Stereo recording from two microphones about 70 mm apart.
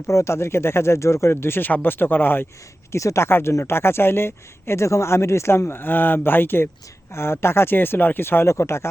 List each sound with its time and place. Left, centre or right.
0.1 s speech: left
2.9 s speech: left